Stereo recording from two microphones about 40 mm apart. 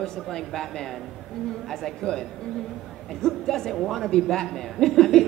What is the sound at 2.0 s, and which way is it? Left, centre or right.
A man's voice, centre.